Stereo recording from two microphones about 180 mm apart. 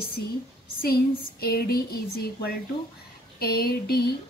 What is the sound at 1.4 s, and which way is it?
Speech, 60° left (ahead or behind).